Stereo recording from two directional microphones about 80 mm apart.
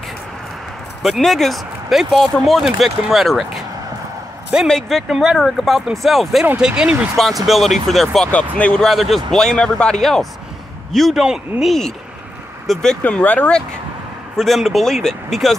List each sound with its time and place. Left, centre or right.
1.0 s speech: centre
4.6 s speech: centre
6.4 s speech: centre
8.3 s speech: centre
8.8 s speech: centre
13.0 s speech: left
14.3 s speech: centre